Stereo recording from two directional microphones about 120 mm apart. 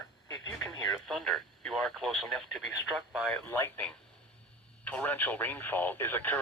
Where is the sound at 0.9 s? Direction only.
Centre (ahead or behind).